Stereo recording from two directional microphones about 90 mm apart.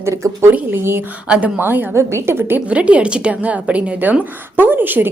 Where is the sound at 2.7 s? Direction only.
15° right (ahead or behind).